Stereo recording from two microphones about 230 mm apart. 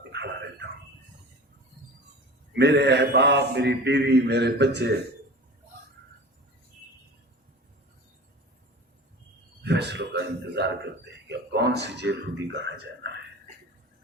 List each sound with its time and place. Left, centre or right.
2.6 s mantra: right
9.6 s a sound: right
11.3 s mantra: right